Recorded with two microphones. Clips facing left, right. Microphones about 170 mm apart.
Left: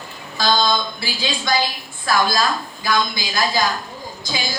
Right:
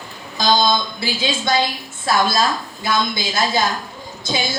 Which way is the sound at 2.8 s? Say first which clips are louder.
Right 1 dB; 25° right (ahead or behind).